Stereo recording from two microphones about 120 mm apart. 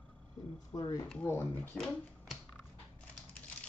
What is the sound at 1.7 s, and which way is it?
Speech, centre (ahead or behind).